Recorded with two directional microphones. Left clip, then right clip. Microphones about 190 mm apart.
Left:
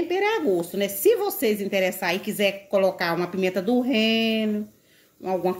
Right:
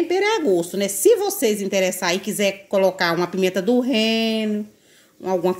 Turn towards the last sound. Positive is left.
turn(degrees=-35)  # may be behind; listen again after turning